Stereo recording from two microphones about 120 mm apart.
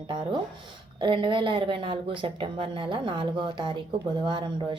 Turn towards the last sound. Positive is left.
turn(degrees=-40)  # may be behind; listen again after turning